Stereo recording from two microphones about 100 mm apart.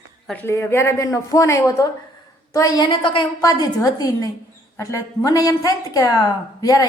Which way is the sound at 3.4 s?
40° left (ahead or behind).